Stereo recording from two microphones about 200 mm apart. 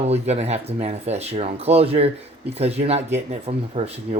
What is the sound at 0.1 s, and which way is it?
Speech, 35° right (ahead or behind).